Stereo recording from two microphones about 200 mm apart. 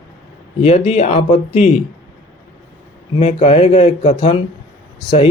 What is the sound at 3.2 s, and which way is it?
Speech, 30° left (ahead or behind).